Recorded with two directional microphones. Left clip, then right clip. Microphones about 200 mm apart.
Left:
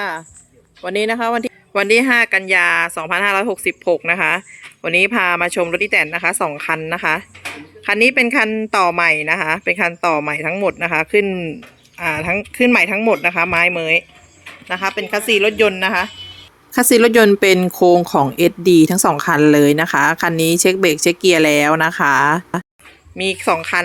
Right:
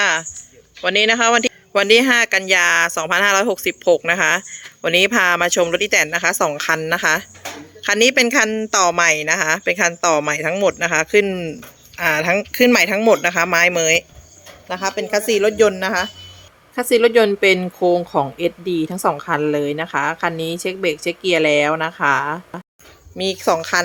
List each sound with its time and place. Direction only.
0.0 s a sound: centre (ahead or behind)
0.8 s speech: 5° left (ahead or behind)
16.7 s a woman's voice: 25° left (ahead or behind)
23.1 s speech: centre (ahead or behind)